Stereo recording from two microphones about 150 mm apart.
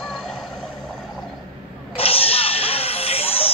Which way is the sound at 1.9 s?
40° left (ahead or behind).